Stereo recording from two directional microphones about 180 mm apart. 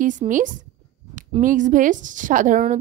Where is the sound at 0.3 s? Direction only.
45° right (ahead or behind).